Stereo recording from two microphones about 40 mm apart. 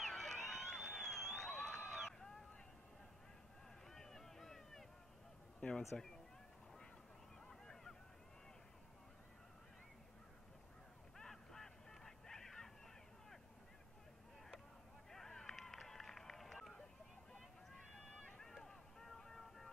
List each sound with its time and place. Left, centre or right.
0.0 s a sound: centre
3.9 s a sound: centre
5.9 s speech: left
7.4 s honk: centre
11.1 s honk: centre
15.0 s run: centre
17.9 s music: centre